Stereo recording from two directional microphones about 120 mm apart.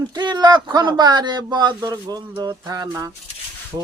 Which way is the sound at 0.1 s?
35° right (ahead or behind).